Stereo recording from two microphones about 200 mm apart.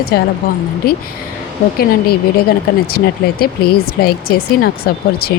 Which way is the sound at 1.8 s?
50° left (ahead or behind).